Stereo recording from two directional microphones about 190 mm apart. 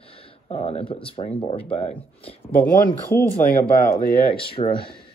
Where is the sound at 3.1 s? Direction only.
10° left (ahead or behind).